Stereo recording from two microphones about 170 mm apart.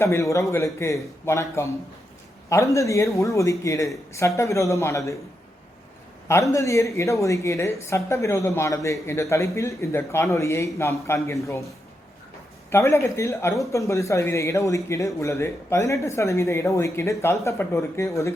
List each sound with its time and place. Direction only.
0.0 s speech: 15° left (ahead or behind)
6.2 s speech: 15° left (ahead or behind)
12.7 s speech: 15° left (ahead or behind)